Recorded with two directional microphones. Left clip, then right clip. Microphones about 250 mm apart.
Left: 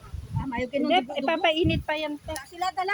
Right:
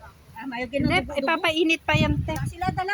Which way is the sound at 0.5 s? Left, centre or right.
Centre.